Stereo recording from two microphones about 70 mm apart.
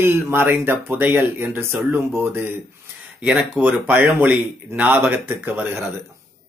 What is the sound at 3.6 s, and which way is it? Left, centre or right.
A man's voice, right.